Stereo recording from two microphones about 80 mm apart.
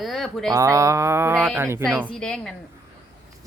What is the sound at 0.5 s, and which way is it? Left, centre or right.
Speech, right.